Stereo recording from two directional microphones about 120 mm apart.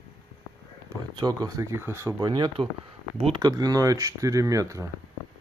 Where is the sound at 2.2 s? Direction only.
35° right (ahead or behind).